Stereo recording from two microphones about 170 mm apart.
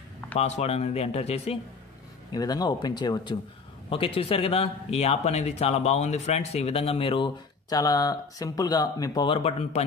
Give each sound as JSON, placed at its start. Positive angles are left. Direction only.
{"t": 0.4, "sound": "speech", "side_deg": 40}
{"t": 2.3, "sound": "speech", "side_deg": 25}